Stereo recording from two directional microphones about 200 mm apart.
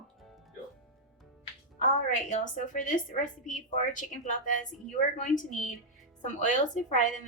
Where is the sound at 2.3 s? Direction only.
40° left (ahead or behind).